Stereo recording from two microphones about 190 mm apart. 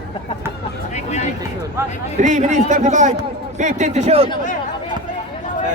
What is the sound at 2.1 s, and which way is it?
A man's voice, 40° right (ahead or behind).